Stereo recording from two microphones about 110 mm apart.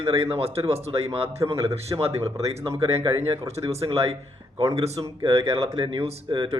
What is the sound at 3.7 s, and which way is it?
Speech, 65° right (ahead or behind).